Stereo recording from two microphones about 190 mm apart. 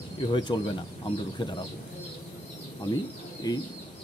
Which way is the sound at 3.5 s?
20° left (ahead or behind).